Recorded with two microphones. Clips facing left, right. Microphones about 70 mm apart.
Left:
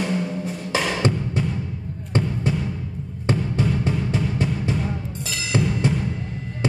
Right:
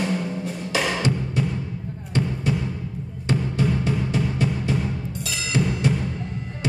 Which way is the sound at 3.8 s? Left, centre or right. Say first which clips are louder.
Even; left.